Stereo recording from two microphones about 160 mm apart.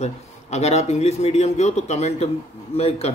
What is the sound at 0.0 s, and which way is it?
A man's voice, 45° left (ahead or behind).